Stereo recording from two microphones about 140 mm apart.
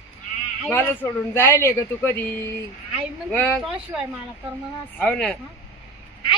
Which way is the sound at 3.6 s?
10° right (ahead or behind).